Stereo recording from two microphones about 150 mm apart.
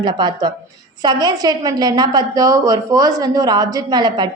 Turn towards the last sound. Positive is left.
turn(degrees=-30)  # may be behind; listen again after turning